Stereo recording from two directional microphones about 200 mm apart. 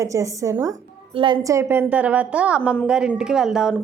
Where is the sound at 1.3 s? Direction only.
15° right (ahead or behind).